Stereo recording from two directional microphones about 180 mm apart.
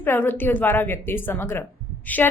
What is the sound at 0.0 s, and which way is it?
A woman's voice, 10° left (ahead or behind).